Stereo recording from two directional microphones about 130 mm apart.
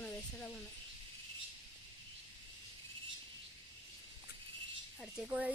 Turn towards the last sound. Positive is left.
turn(degrees=-5)  # may be behind; listen again after turning